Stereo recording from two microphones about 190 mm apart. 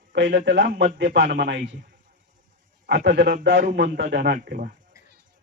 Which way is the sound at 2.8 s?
55° right (ahead or behind).